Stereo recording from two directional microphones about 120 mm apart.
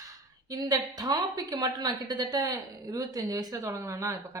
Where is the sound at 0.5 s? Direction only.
35° right (ahead or behind).